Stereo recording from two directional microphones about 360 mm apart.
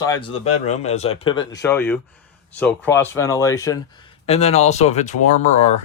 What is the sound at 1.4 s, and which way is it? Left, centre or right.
Speech, left.